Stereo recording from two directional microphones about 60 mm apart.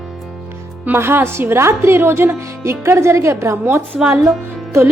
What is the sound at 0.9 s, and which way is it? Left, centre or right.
A woman's voice, right.